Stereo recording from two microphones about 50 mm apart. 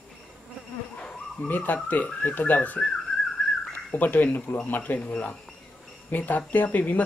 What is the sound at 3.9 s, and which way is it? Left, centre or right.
Speech, left.